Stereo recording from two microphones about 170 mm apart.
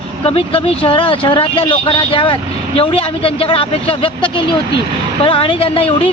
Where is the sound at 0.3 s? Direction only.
35° left (ahead or behind).